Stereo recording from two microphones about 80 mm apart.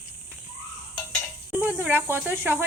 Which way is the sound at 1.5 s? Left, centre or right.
Centre.